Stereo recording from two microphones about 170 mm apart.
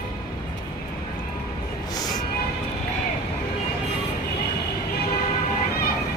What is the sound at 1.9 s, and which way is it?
Music, 25° left (ahead or behind).